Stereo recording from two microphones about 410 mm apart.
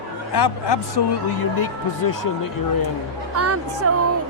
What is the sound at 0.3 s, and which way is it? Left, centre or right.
A man's voice, left.